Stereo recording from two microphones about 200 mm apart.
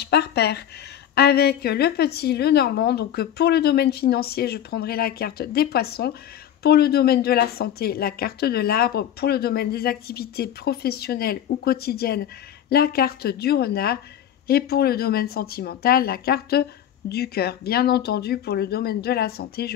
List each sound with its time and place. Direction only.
0.0 s a woman's voice: 55° left (ahead or behind)